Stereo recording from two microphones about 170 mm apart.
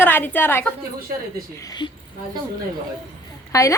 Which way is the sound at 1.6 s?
25° left (ahead or behind).